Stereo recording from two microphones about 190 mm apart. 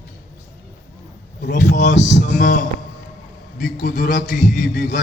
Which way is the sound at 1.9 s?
70° left (ahead or behind).